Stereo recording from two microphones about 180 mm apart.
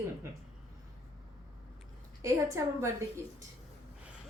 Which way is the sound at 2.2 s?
15° right (ahead or behind).